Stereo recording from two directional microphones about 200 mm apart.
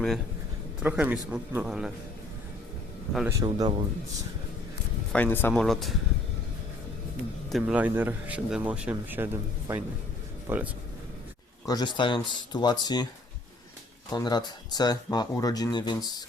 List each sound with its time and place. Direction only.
0.8 s a man's voice: 5° right (ahead or behind)
3.2 s speech: 20° right (ahead or behind)
5.1 s a man's voice: 10° left (ahead or behind)
7.5 s speech: 5° right (ahead or behind)
11.6 s speech: 20° left (ahead or behind)
14.1 s speech: 20° left (ahead or behind)